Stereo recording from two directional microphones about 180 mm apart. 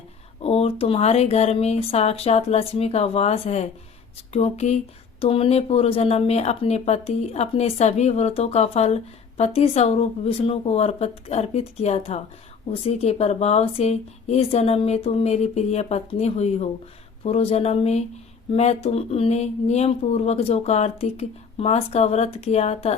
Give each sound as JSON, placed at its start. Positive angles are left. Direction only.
{"t": 0.4, "sound": "speech", "side_deg": 35}